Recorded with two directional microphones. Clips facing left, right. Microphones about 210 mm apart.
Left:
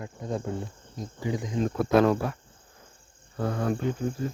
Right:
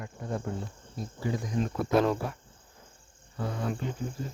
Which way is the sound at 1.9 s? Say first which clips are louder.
Left 4 dB; 65° left (ahead or behind).